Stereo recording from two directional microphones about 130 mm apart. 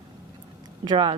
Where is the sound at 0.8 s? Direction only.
35° right (ahead or behind).